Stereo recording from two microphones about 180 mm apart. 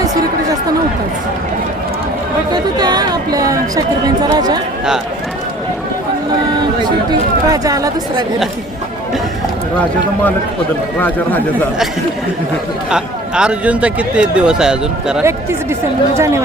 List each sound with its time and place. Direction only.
2.5 s chatter: 20° right (ahead or behind)
7.1 s speech: 20° right (ahead or behind)
11.0 s speech: 10° left (ahead or behind)
12.9 s speech: 5° right (ahead or behind)